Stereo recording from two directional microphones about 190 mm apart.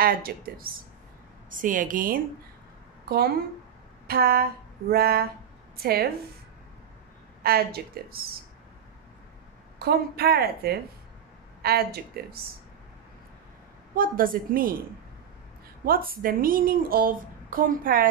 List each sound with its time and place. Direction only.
0.0 s a woman's voice: 50° right (ahead or behind)
4.1 s a woman's voice: 55° right (ahead or behind)
7.4 s a woman's voice: 55° right (ahead or behind)
9.8 s a woman's voice: 55° right (ahead or behind)
13.9 s a woman's voice: 45° right (ahead or behind)
15.8 s a woman's voice: 50° right (ahead or behind)